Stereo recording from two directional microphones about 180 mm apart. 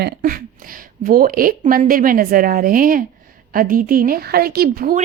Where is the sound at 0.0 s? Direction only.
50° right (ahead or behind).